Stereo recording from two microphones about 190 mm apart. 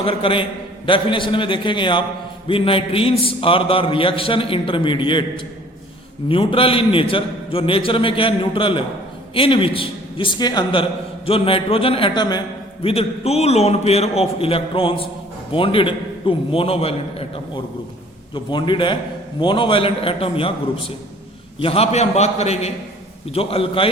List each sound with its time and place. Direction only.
0.0 s a man's voice: 30° left (ahead or behind)
6.2 s a man's voice: 30° left (ahead or behind)
21.6 s a man's voice: 30° left (ahead or behind)